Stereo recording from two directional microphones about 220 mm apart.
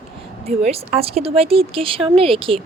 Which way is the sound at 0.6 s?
30° right (ahead or behind).